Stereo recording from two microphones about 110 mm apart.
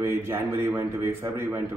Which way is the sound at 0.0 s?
20° right (ahead or behind).